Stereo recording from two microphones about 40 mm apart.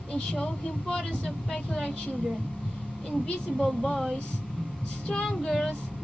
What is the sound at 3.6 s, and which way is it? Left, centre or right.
Speech, centre.